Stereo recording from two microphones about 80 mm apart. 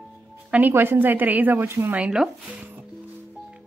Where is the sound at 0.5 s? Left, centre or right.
Right.